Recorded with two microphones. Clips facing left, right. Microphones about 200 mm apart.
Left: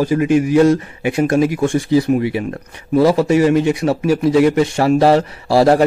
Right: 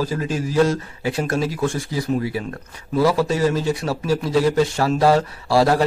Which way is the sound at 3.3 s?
65° left (ahead or behind).